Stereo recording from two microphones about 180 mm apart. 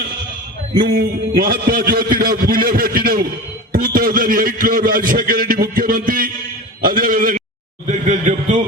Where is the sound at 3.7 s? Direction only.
50° right (ahead or behind).